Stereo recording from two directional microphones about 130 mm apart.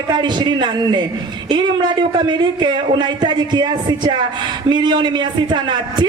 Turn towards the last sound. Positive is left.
turn(degrees=-35)  # may be behind; listen again after turning